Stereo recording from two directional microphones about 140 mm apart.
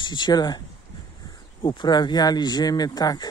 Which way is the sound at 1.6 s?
35° left (ahead or behind).